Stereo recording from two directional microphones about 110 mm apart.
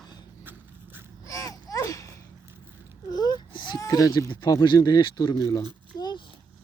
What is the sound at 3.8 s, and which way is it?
Speech, 30° left (ahead or behind).